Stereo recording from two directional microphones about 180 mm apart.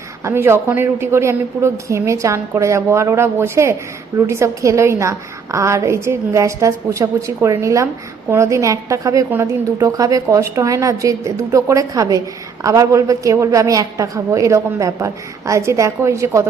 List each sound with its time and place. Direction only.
0.3 s a woman's voice: 15° right (ahead or behind)